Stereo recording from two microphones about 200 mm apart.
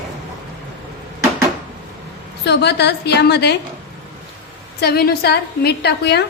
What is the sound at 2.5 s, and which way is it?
A woman's voice, 55° left (ahead or behind).